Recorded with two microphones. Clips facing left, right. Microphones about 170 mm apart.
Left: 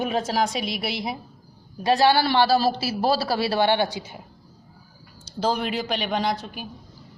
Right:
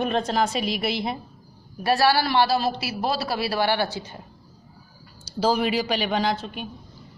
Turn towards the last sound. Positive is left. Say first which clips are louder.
# right 1 dB
turn(degrees=5)  # may be behind; listen again after turning